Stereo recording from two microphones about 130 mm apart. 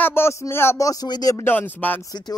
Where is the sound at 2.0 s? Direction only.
30° left (ahead or behind).